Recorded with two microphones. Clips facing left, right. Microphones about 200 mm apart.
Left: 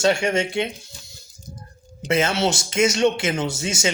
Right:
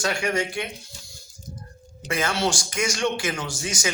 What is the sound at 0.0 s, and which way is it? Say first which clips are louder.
Speech: left 5 dB; 25° left (ahead or behind).